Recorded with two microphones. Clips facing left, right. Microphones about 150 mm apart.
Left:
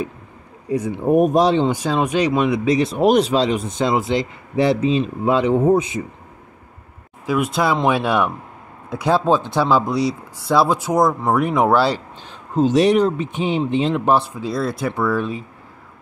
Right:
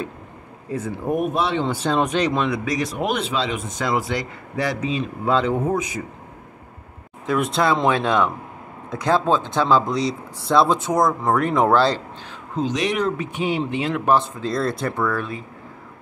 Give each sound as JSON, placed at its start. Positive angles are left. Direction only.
{"t": 0.7, "sound": "speech", "side_deg": 15}
{"t": 1.0, "sound": "speech", "side_deg": 40}
{"t": 1.6, "sound": "speech", "side_deg": 15}
{"t": 2.6, "sound": "speech", "side_deg": 25}
{"t": 3.1, "sound": "speech", "side_deg": 40}
{"t": 5.3, "sound": "speech", "side_deg": 15}
{"t": 5.7, "sound": "speech", "side_deg": 25}
{"t": 7.2, "sound": "speech", "side_deg": 5}
{"t": 12.5, "sound": "speech", "side_deg": 40}
{"t": 14.4, "sound": "speech", "side_deg": 5}